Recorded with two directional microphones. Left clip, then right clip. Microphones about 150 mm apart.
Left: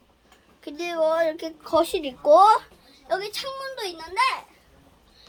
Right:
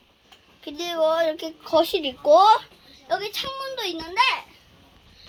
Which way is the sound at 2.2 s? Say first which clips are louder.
Even; 10° right (ahead or behind).